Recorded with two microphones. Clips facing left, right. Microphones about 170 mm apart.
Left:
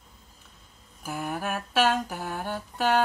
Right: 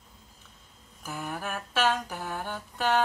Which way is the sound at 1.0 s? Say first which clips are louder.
Left 4 dB; 10° left (ahead or behind).